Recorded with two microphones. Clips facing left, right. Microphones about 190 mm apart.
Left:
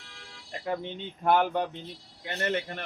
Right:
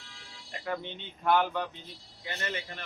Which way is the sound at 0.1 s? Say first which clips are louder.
Left 4 dB; 60° left (ahead or behind).